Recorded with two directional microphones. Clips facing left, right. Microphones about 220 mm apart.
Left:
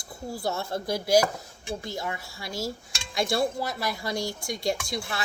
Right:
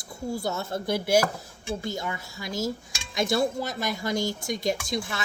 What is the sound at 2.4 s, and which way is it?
Speech, 20° right (ahead or behind).